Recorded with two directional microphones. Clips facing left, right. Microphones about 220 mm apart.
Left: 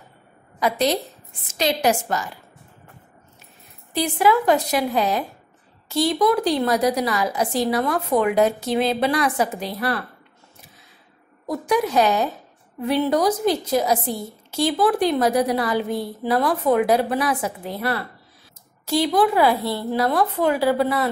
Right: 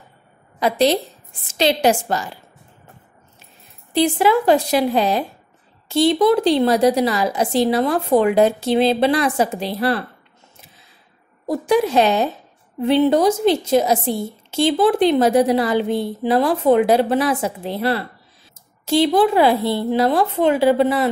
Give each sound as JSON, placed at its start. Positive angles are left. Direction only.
{"t": 0.6, "sound": "a woman's voice", "side_deg": -30}
{"t": 3.9, "sound": "a woman's voice", "side_deg": -30}
{"t": 11.4, "sound": "a woman's voice", "side_deg": -30}